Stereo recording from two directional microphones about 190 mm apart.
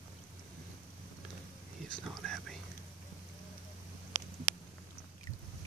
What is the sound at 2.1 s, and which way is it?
Whispering, centre (ahead or behind).